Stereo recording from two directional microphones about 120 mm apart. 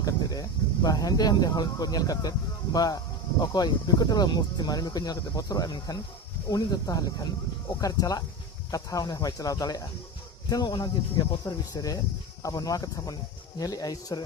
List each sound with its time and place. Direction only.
0.0 s speech: 30° left (ahead or behind)